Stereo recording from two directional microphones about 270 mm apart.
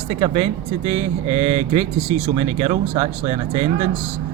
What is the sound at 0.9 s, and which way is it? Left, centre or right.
Mantra, right.